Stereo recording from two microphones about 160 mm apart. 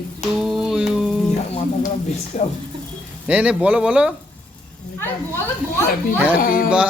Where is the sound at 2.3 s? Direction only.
40° left (ahead or behind).